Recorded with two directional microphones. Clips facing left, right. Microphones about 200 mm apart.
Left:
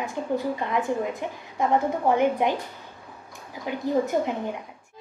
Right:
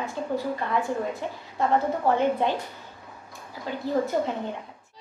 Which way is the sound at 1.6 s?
15° left (ahead or behind).